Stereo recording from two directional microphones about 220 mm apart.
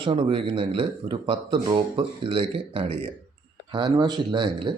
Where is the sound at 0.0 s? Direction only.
20° right (ahead or behind).